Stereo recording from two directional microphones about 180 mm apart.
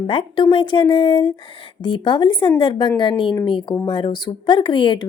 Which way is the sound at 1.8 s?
25° left (ahead or behind).